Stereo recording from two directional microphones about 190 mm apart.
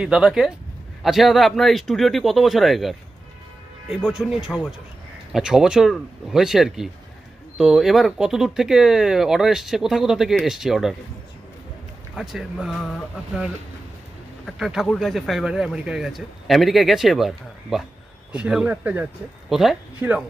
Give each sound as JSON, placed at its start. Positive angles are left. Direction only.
{"t": 0.0, "sound": "speech", "side_deg": -5}
{"t": 12.2, "sound": "speech", "side_deg": 0}